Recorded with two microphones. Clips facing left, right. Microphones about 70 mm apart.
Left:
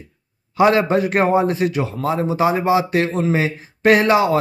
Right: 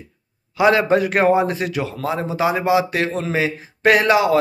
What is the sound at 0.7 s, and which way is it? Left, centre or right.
Speech, left.